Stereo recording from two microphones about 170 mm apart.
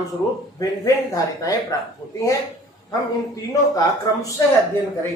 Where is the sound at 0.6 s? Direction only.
20° left (ahead or behind).